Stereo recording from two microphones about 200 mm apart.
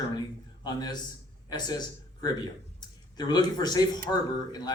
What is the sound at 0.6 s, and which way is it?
A man's voice, 20° left (ahead or behind).